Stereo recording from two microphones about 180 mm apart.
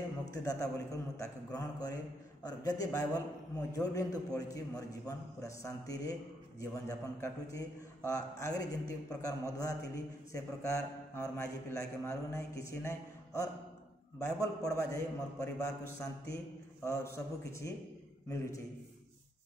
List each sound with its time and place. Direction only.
0.3 s a man's voice: 20° left (ahead or behind)